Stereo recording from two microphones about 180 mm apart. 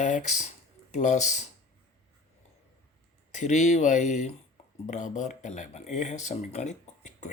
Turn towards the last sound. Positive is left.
turn(degrees=40)  # may be behind; listen again after turning